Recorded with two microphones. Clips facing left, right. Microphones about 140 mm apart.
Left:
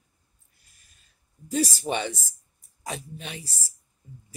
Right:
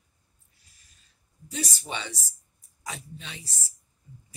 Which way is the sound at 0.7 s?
50° left (ahead or behind).